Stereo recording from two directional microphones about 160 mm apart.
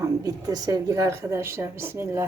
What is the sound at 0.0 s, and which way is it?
A woman's voice, 25° right (ahead or behind).